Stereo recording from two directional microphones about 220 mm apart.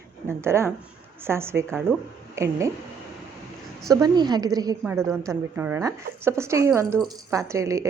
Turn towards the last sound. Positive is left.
turn(degrees=-15)  # may be behind; listen again after turning